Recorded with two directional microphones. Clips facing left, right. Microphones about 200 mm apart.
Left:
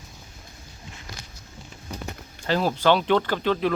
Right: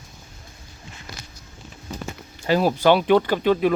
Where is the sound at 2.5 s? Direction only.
10° right (ahead or behind).